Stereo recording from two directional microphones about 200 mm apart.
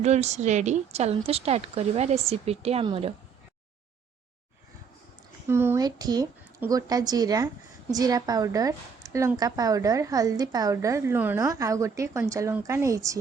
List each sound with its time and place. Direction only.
0.0 s speech: 35° right (ahead or behind)
5.5 s a woman's voice: 10° right (ahead or behind)